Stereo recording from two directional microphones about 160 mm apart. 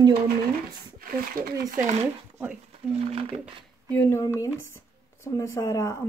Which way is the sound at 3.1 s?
40° right (ahead or behind).